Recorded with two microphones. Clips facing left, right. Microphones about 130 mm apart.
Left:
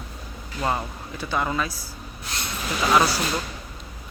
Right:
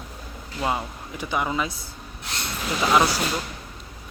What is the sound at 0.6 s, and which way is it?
Speech, 10° right (ahead or behind).